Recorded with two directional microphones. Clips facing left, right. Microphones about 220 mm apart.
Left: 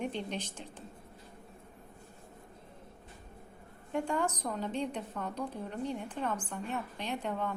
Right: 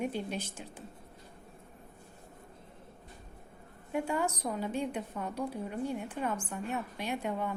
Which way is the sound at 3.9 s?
10° right (ahead or behind).